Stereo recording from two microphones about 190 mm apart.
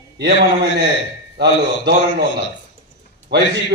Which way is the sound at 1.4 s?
60° right (ahead or behind).